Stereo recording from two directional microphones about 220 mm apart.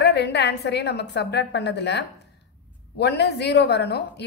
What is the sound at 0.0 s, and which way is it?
A woman's voice, 50° left (ahead or behind).